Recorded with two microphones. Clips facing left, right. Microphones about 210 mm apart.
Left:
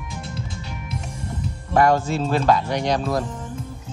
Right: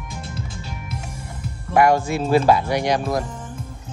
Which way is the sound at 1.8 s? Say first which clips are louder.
Right 1 dB; 10° right (ahead or behind).